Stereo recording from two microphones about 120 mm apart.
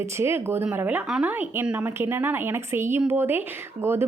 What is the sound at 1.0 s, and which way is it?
Speech, 5° right (ahead or behind).